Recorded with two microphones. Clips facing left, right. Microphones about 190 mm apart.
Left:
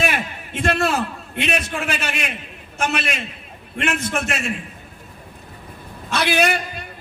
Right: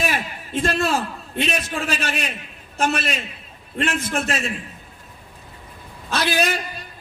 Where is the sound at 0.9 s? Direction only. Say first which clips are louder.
Left 1 dB; 35° right (ahead or behind).